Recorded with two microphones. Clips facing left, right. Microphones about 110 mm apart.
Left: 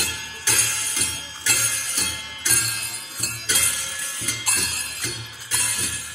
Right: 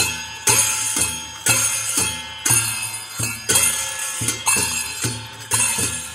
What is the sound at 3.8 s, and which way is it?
Music, 90° right.